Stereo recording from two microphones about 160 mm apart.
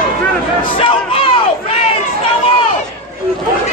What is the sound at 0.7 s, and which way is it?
Crowd, 35° left (ahead or behind).